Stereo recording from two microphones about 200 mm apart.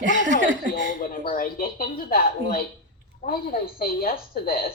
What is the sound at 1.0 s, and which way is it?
Speech, 40° left (ahead or behind).